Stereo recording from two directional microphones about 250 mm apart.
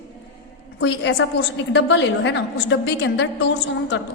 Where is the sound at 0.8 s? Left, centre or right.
Left.